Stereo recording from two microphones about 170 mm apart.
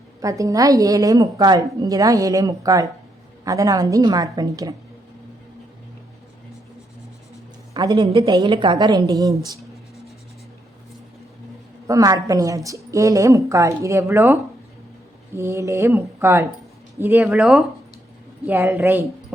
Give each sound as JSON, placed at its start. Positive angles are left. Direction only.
{"t": 0.2, "sound": "a woman's voice", "side_deg": -20}
{"t": 7.7, "sound": "a woman's voice", "side_deg": -20}
{"t": 11.9, "sound": "a woman's voice", "side_deg": -20}
{"t": 15.4, "sound": "speech", "side_deg": -15}